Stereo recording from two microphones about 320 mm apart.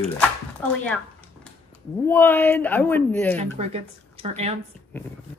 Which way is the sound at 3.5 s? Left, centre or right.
Centre.